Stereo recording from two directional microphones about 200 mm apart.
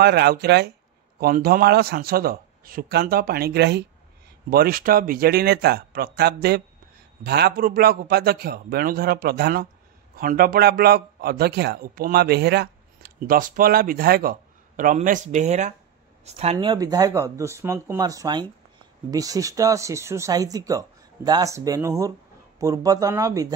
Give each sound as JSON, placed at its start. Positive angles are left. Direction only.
{"t": 0.0, "sound": "a man's voice", "side_deg": -55}
{"t": 16.5, "sound": "speech", "side_deg": -20}